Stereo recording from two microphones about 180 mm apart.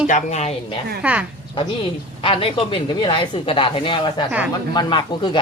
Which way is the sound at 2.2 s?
30° left (ahead or behind).